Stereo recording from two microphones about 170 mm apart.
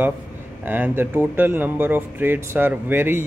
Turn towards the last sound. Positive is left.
turn(degrees=-10)  # may be behind; listen again after turning